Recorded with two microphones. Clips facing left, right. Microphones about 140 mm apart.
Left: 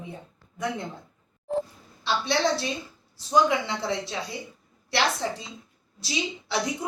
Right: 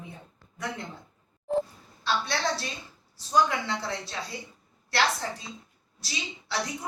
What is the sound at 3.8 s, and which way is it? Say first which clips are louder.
Speech: left 5 dB; 20° left (ahead or behind).